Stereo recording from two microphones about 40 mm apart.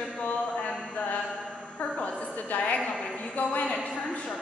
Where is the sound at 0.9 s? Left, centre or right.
Left.